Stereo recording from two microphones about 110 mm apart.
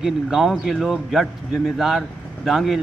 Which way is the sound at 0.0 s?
5° right (ahead or behind).